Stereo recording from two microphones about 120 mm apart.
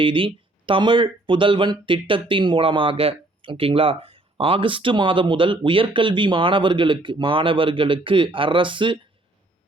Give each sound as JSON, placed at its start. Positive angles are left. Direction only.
{"t": 0.0, "sound": "speech", "side_deg": -45}